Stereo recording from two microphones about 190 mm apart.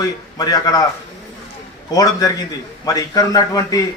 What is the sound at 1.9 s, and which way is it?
A man's voice, 20° left (ahead or behind).